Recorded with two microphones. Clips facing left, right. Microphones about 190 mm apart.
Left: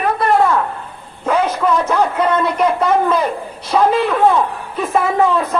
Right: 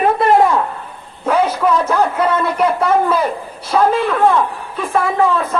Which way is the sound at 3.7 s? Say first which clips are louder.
Even; 5° left (ahead or behind).